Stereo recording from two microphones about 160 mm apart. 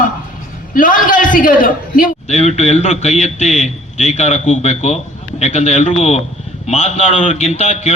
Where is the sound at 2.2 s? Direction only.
45° left (ahead or behind).